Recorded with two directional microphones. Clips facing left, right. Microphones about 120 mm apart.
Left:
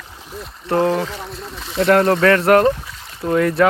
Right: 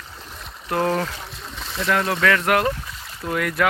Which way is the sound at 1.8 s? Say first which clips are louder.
Left 8 dB; 45° left (ahead or behind).